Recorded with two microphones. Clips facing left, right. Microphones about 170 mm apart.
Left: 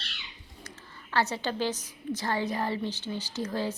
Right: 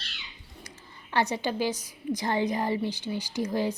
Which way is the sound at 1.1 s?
15° right (ahead or behind).